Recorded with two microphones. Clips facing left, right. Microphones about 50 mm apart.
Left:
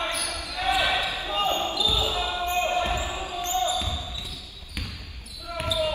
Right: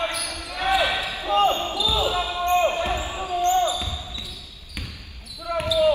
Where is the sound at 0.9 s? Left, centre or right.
Left.